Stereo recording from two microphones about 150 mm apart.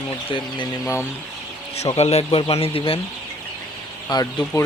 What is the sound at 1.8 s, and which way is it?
Speech, 45° left (ahead or behind).